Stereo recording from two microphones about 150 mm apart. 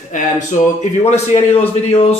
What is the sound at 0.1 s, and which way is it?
Speech, 55° left (ahead or behind).